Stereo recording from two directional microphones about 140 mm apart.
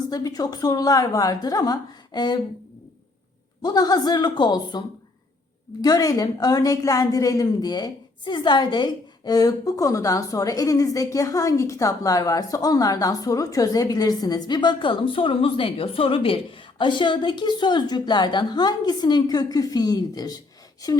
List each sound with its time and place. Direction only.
0.1 s a woman's voice: 25° left (ahead or behind)
3.6 s a woman's voice: 30° left (ahead or behind)
5.8 s a woman's voice: 25° left (ahead or behind)